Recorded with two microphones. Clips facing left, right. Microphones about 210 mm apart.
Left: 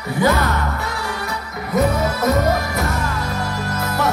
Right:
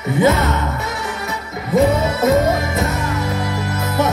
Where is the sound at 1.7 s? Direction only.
25° right (ahead or behind).